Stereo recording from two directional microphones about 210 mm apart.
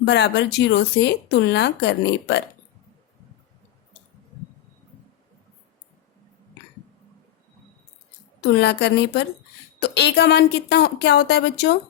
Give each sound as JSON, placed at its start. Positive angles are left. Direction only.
{"t": 0.0, "sound": "speech", "side_deg": 55}
{"t": 8.4, "sound": "speech", "side_deg": 50}